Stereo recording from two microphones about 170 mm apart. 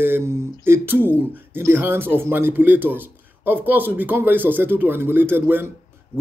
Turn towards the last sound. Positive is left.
turn(degrees=-10)  # may be behind; listen again after turning